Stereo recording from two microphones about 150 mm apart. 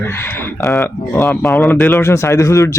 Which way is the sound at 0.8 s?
15° left (ahead or behind).